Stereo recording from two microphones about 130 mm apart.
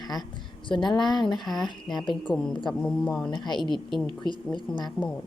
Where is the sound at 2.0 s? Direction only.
40° left (ahead or behind).